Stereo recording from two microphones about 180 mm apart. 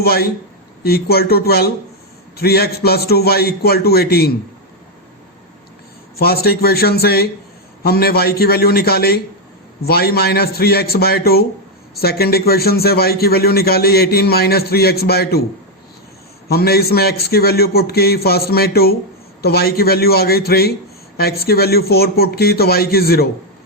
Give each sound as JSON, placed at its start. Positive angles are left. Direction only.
{"t": 0.0, "sound": "a man's voice", "side_deg": 60}
{"t": 6.1, "sound": "a man's voice", "side_deg": 60}
{"t": 16.5, "sound": "a man's voice", "side_deg": 60}